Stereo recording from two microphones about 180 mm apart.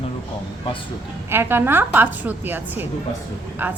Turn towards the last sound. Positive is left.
turn(degrees=-10)  # may be behind; listen again after turning